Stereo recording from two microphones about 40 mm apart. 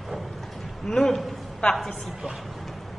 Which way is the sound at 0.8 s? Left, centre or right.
Centre.